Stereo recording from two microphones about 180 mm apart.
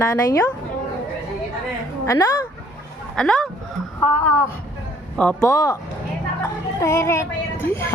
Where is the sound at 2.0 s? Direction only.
15° left (ahead or behind).